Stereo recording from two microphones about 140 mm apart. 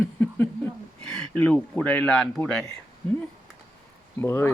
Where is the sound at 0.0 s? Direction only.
15° left (ahead or behind).